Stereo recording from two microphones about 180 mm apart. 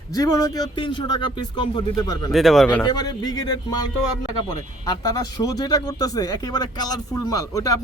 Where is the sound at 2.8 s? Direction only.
20° left (ahead or behind).